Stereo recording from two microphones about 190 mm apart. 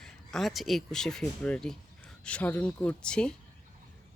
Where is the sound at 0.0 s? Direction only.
Centre (ahead or behind).